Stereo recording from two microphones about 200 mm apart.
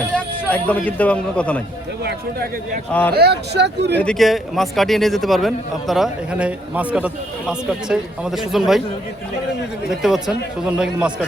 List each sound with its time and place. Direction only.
0.5 s a man's voice: 10° left (ahead or behind)
2.9 s a man's voice: 5° left (ahead or behind)
3.2 s speech: 55° right (ahead or behind)
4.0 s a man's voice: centre (ahead or behind)
9.9 s a man's voice: centre (ahead or behind)